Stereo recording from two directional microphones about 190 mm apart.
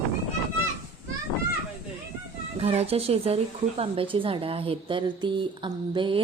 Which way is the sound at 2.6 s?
30° right (ahead or behind).